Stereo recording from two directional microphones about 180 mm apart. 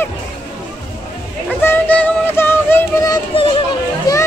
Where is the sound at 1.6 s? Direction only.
10° left (ahead or behind).